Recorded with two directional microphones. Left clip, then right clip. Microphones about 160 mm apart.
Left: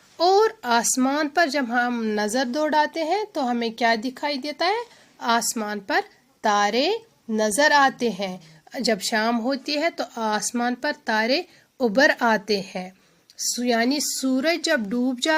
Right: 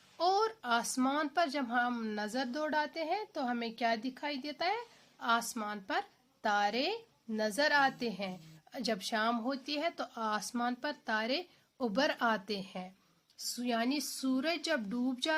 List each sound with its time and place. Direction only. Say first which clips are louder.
0.2 s speech: left 12 dB; 30° left (ahead or behind)
2.1 s a woman's voice: left 13 dB; 40° left (ahead or behind)